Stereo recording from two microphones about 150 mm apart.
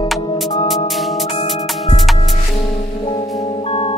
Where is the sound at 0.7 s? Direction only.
Centre (ahead or behind).